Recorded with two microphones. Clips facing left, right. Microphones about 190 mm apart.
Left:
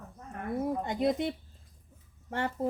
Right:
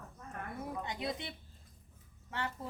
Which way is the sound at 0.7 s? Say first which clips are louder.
Left 9 dB; 45° left (ahead or behind).